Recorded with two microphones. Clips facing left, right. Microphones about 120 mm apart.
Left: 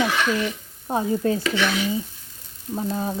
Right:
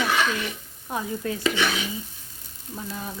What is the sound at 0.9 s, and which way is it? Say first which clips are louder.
Speech: left 7 dB; 35° left (ahead or behind).